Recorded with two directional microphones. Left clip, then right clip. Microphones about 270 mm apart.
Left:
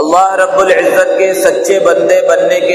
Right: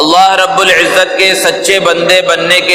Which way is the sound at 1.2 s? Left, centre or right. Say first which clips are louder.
Right 1 dB; right.